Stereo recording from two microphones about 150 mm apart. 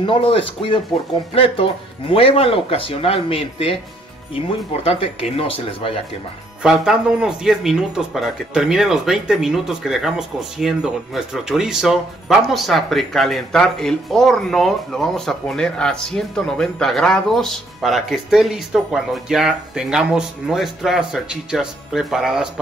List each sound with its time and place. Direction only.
0.0 s speech: 35° left (ahead or behind)
6.6 s speech: 5° right (ahead or behind)